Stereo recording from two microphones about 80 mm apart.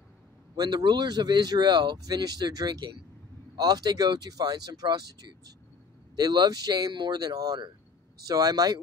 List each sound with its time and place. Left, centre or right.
0.6 s speech: right